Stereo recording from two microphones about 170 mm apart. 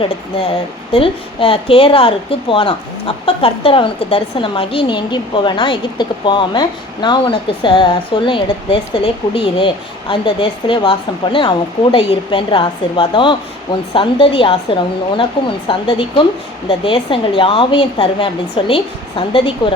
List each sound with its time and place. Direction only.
0.9 s a woman's voice: 30° left (ahead or behind)